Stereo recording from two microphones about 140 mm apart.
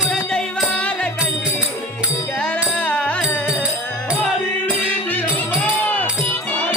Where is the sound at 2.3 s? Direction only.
5° left (ahead or behind).